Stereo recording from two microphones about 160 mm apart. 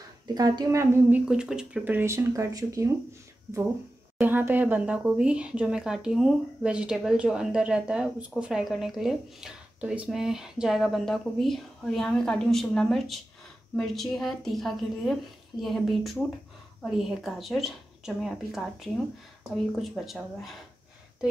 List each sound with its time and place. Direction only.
0.3 s a woman's voice: 25° right (ahead or behind)
1.2 s speech: 5° right (ahead or behind)
4.2 s speech: 10° right (ahead or behind)